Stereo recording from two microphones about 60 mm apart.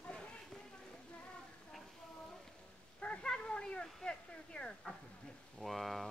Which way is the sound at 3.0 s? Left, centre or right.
Centre.